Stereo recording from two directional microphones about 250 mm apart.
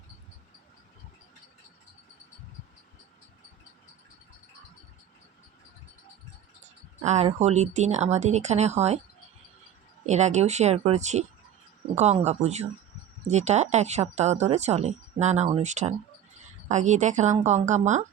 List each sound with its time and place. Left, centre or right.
7.0 s speech: right
10.1 s speech: right